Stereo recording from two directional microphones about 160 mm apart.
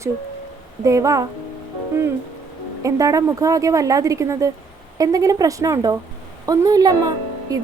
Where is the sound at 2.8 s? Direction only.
20° right (ahead or behind).